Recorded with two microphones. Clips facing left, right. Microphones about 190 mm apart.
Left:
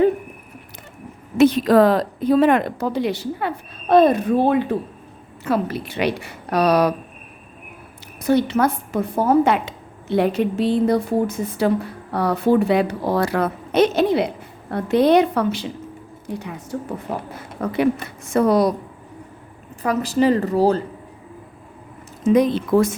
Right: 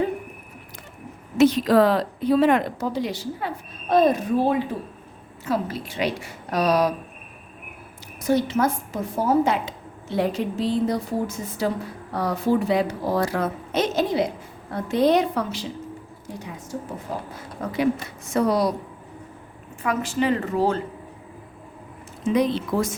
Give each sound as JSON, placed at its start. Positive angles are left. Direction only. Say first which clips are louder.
{"t": 1.4, "sound": "a woman's voice", "louder": "left 3 dB", "side_deg": 55}
{"t": 8.2, "sound": "a woman's voice", "louder": "left 3 dB", "side_deg": 65}
{"t": 19.8, "sound": "a woman's voice", "louder": "left 5 dB", "side_deg": 40}
{"t": 22.2, "sound": "speech", "louder": "left 5 dB", "side_deg": 50}